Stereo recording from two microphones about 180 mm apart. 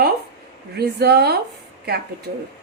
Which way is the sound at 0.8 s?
60° right (ahead or behind).